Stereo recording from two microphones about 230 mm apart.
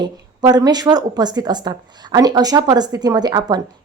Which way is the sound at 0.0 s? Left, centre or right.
Centre.